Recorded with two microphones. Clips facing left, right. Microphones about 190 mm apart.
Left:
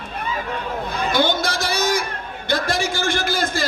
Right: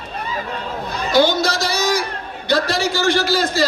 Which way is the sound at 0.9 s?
55° left (ahead or behind).